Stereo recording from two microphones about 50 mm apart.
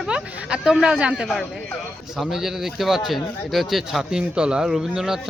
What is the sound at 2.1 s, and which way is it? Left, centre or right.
A man's voice, centre.